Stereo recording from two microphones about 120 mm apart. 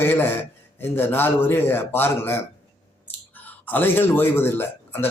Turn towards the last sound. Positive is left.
turn(degrees=20)  # may be behind; listen again after turning